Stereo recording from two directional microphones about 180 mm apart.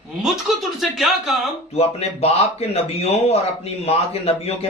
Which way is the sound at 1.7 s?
35° left (ahead or behind).